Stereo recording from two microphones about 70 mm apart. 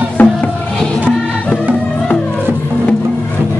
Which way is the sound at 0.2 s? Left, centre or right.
Left.